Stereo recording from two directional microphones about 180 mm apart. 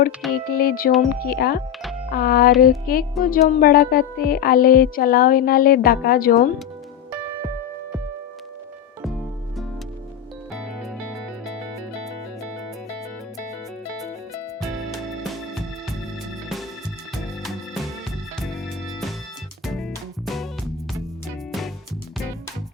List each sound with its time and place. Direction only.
0.3 s speech: 55° left (ahead or behind)
10.5 s music: centre (ahead or behind)
15.2 s music: centre (ahead or behind)
18.4 s music: centre (ahead or behind)